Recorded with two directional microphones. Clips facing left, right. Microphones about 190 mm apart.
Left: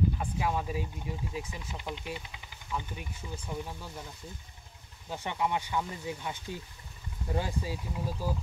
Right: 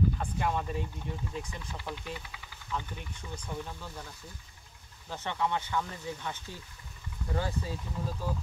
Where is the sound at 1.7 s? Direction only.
20° left (ahead or behind).